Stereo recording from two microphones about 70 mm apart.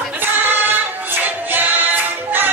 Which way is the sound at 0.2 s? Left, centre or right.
Right.